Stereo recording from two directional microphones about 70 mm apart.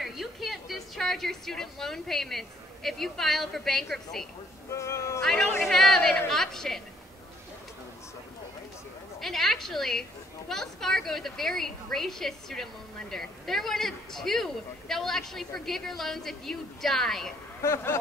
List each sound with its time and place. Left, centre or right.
0.0 s a woman's voice: centre
4.6 s speech: left
5.2 s speech: centre
9.2 s speech: centre
17.6 s speech: left